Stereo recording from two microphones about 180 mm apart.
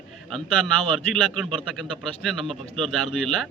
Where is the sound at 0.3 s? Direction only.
Centre (ahead or behind).